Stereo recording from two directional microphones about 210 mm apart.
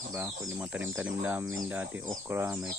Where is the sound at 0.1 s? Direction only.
10° right (ahead or behind).